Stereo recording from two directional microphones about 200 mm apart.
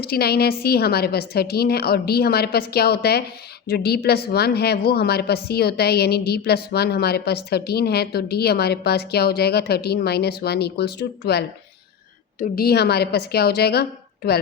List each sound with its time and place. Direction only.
0.0 s a woman's voice: 50° left (ahead or behind)